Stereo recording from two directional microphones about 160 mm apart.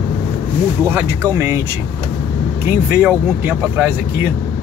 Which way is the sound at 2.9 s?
10° right (ahead or behind).